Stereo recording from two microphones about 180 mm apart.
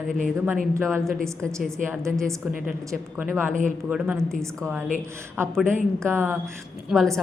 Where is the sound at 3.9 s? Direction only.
10° right (ahead or behind).